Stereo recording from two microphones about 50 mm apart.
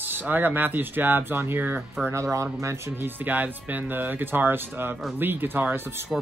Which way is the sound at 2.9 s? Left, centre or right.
Right.